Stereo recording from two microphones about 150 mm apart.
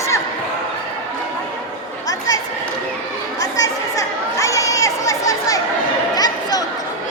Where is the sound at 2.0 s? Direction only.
25° left (ahead or behind).